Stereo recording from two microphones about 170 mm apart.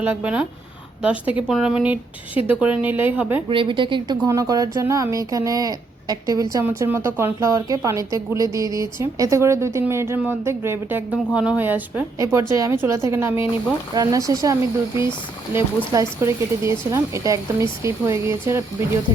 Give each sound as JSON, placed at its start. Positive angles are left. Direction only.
{"t": 0.0, "sound": "speech", "side_deg": -10}
{"t": 1.5, "sound": "speech", "side_deg": -5}
{"t": 3.5, "sound": "speech", "side_deg": -30}